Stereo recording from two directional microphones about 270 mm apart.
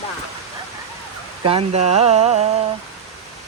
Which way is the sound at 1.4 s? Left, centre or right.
Right.